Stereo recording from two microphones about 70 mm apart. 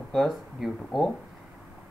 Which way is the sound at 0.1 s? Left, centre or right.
Centre.